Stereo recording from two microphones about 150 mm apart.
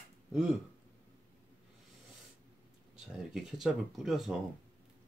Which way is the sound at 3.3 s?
Centre (ahead or behind).